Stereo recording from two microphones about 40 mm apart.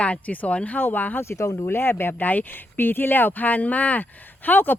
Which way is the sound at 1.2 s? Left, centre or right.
Left.